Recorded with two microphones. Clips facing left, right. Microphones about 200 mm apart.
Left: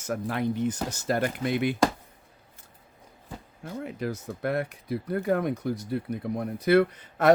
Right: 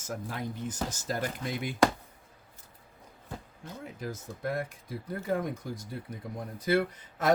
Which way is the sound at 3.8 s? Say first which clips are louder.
Left 6 dB; 70° left (ahead or behind).